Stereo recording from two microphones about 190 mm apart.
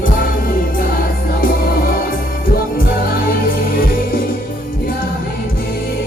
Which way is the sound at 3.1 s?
50° left (ahead or behind).